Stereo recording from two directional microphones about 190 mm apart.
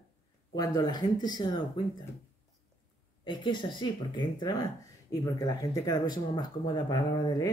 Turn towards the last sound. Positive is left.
turn(degrees=20)  # may be behind; listen again after turning